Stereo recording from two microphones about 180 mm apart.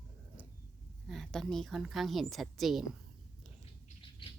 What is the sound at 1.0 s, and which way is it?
A woman's voice, centre (ahead or behind).